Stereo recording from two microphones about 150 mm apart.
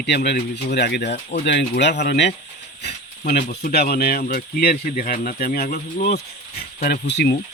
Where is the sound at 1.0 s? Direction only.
50° left (ahead or behind).